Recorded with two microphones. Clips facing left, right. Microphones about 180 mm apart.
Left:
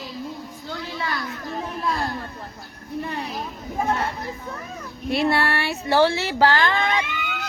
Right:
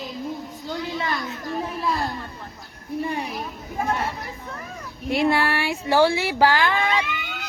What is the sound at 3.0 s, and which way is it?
Speech, 10° right (ahead or behind).